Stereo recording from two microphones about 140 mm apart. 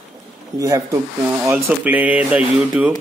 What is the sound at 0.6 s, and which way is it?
Speech, 25° right (ahead or behind).